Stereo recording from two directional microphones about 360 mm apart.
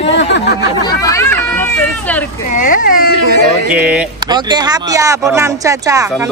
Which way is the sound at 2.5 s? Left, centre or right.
Left.